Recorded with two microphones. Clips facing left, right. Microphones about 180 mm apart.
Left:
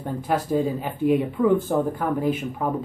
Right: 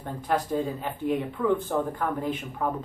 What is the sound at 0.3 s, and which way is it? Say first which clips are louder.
Speech: left 4 dB; 10° left (ahead or behind).